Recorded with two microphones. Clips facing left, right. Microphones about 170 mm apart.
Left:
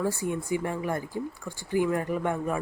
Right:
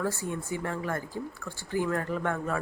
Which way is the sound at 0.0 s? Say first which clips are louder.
Left 3 dB; 15° left (ahead or behind).